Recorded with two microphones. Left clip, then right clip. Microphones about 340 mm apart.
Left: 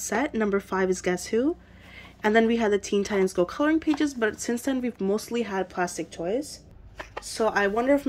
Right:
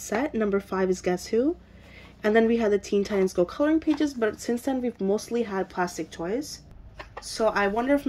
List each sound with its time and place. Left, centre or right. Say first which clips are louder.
0.0 s a woman's voice: even; centre